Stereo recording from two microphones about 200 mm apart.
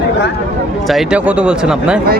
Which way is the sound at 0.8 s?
Centre (ahead or behind).